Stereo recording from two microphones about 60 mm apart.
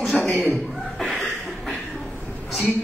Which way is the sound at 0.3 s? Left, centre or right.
Left.